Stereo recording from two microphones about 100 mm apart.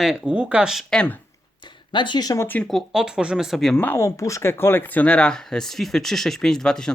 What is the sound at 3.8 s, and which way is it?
Speech, 25° left (ahead or behind).